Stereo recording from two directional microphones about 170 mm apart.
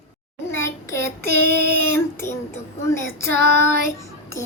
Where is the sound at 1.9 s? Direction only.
15° left (ahead or behind).